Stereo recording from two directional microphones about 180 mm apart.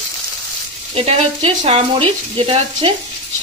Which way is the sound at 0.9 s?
35° right (ahead or behind).